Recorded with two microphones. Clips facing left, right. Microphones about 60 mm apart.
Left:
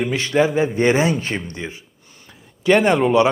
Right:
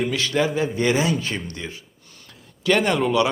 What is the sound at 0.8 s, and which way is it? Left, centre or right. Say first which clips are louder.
Speech: left 4 dB; left.